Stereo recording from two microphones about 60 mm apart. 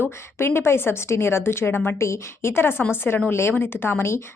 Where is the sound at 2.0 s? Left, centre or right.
Left.